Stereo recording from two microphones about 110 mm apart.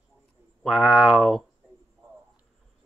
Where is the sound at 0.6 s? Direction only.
Centre (ahead or behind).